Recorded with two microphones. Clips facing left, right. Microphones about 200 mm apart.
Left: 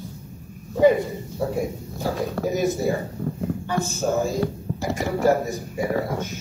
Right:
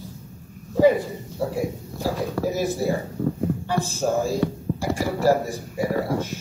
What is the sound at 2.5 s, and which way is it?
Speech, 35° right (ahead or behind).